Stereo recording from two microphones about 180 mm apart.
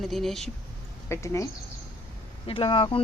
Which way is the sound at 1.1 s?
15° left (ahead or behind).